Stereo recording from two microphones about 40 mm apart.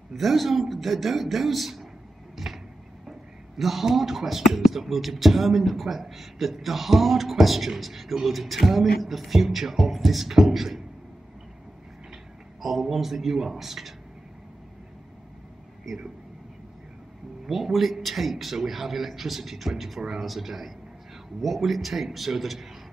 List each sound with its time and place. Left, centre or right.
0.1 s speech: centre
2.3 s a sound: centre
3.1 s speech: centre
12.6 s speech: centre
15.9 s speech: centre
17.5 s speech: centre